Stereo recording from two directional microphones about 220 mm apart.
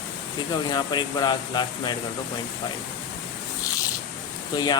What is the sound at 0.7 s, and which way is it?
Speech, 20° left (ahead or behind).